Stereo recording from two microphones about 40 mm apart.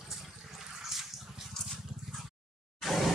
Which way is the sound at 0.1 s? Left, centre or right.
Centre.